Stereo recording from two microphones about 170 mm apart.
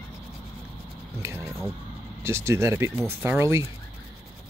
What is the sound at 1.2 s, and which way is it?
Speech, 15° right (ahead or behind).